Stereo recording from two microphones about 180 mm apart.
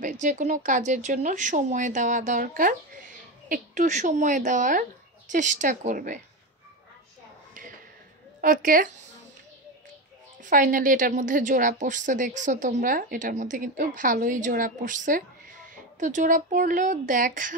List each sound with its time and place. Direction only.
0.0 s a woman's voice: 45° right (ahead or behind)
8.4 s a woman's voice: 50° right (ahead or behind)
10.4 s a woman's voice: 50° right (ahead or behind)
16.0 s a woman's voice: 45° right (ahead or behind)